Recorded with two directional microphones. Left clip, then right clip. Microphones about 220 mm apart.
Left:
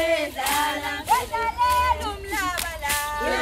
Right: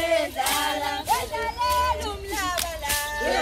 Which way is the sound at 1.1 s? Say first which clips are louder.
Left 7 dB; 20° left (ahead or behind).